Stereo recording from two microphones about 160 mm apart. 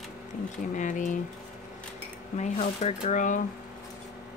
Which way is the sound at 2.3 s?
45° left (ahead or behind).